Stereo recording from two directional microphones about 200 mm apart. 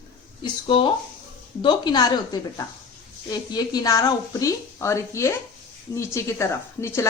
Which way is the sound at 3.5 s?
20° left (ahead or behind).